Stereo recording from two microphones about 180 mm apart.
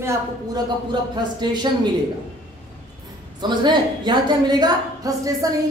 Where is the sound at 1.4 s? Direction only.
25° right (ahead or behind).